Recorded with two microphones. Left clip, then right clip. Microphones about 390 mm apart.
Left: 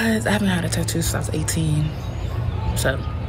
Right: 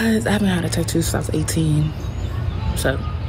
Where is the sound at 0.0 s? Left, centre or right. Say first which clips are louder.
Right 1 dB; centre.